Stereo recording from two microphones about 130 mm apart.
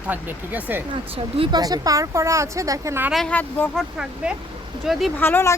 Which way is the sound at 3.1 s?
Centre (ahead or behind).